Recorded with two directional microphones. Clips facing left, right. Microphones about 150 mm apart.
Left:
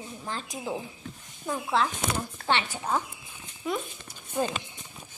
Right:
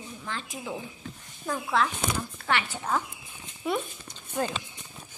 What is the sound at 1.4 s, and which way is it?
A woman's voice, 20° left (ahead or behind).